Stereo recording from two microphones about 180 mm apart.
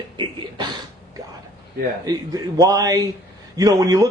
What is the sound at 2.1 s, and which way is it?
Speech, 20° right (ahead or behind).